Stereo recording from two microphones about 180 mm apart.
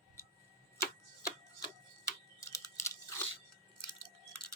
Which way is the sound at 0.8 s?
15° left (ahead or behind).